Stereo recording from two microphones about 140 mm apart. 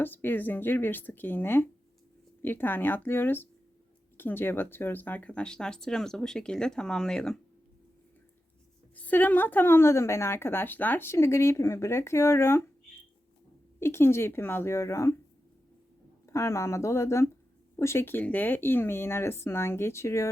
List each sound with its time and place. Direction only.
0.0 s a woman's voice: 15° left (ahead or behind)
9.0 s a woman's voice: 10° left (ahead or behind)
13.7 s speech: 20° left (ahead or behind)
16.2 s a woman's voice: 20° left (ahead or behind)